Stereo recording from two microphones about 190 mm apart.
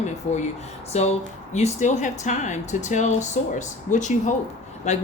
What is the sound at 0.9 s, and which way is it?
Speech, 35° left (ahead or behind).